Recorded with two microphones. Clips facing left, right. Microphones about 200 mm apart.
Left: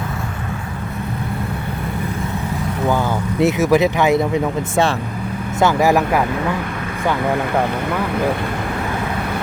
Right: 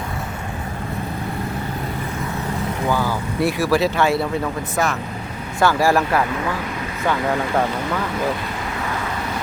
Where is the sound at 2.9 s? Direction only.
20° left (ahead or behind).